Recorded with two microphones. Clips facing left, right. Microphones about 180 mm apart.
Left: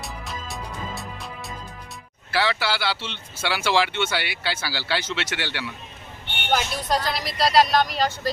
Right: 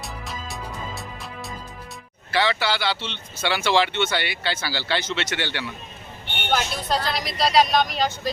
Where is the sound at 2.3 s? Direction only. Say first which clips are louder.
Right 1 dB; 5° left (ahead or behind).